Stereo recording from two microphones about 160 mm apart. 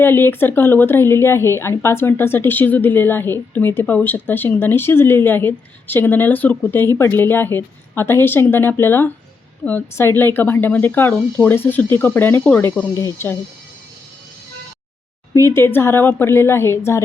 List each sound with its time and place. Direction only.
0.0 s speech: 15° left (ahead or behind)
12.9 s speech: 20° left (ahead or behind)
15.3 s speech: 20° left (ahead or behind)